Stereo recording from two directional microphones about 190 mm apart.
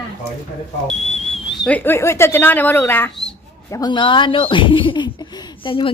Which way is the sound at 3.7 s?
20° left (ahead or behind).